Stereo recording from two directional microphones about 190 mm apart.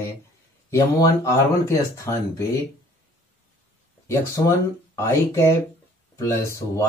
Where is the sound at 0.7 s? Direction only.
15° left (ahead or behind).